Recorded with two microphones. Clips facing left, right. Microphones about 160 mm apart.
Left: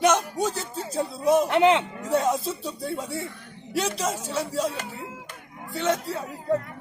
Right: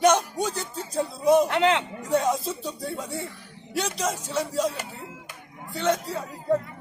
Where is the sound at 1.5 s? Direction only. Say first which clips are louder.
Left 3 dB; 20° left (ahead or behind).